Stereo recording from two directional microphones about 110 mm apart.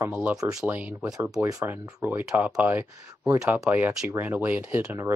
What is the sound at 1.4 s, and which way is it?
Speech, 30° right (ahead or behind).